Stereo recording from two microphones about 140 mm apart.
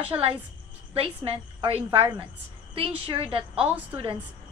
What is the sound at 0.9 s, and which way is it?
A woman's voice, 40° right (ahead or behind).